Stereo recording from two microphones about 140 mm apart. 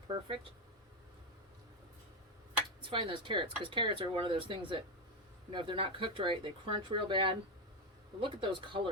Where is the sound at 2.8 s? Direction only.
35° right (ahead or behind).